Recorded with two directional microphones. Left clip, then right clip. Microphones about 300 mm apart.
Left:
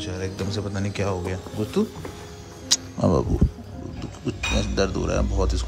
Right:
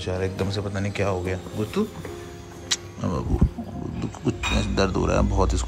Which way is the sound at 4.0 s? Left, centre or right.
Centre.